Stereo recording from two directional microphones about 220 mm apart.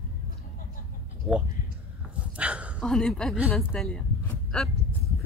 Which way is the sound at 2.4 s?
5° right (ahead or behind).